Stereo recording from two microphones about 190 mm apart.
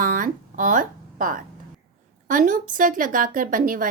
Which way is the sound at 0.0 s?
45° right (ahead or behind).